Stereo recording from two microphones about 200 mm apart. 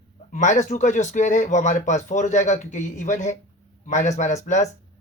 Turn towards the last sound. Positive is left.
turn(degrees=35)  # may be behind; listen again after turning